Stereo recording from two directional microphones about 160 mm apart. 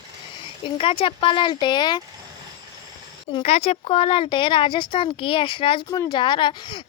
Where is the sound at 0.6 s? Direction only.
35° left (ahead or behind).